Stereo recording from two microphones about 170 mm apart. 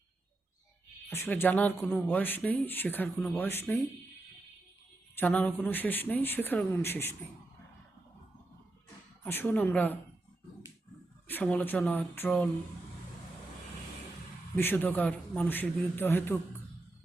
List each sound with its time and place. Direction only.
1.1 s speech: 15° left (ahead or behind)
5.1 s speech: 10° left (ahead or behind)
9.2 s speech: 10° left (ahead or behind)
11.4 s speech: 10° left (ahead or behind)
14.5 s speech: 10° left (ahead or behind)